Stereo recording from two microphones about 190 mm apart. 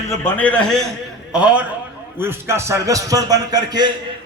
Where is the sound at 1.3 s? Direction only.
5° right (ahead or behind).